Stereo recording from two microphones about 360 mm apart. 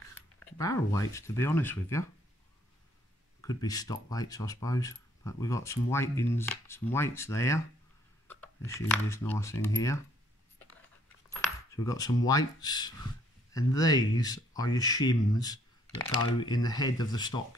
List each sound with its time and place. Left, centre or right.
0.1 s speech: centre
3.3 s speech: centre
11.2 s coin: centre
12.3 s speech: centre